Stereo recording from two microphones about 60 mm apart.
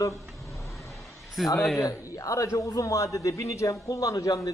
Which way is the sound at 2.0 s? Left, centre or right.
Left.